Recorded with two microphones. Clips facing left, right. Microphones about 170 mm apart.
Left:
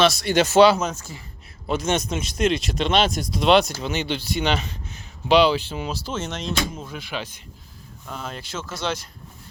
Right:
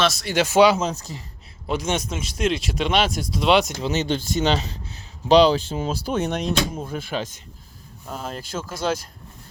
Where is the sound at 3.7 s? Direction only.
20° right (ahead or behind).